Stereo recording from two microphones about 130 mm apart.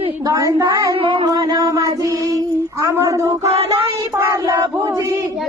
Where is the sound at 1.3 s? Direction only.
30° right (ahead or behind).